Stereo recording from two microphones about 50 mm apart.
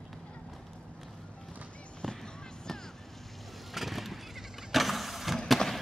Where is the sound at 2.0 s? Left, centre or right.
Centre.